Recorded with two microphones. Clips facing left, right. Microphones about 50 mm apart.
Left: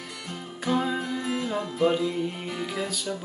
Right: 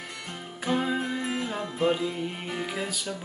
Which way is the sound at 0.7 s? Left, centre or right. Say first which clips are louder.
Left 1 dB; centre.